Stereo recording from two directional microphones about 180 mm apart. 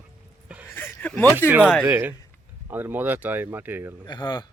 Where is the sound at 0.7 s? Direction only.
10° left (ahead or behind).